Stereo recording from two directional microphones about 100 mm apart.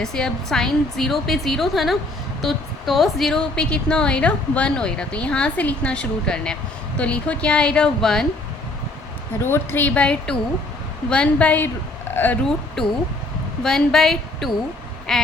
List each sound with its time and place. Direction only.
0.0 s a woman's voice: 5° left (ahead or behind)
9.4 s a woman's voice: 20° left (ahead or behind)
13.6 s a woman's voice: 5° left (ahead or behind)
15.1 s quack: 5° left (ahead or behind)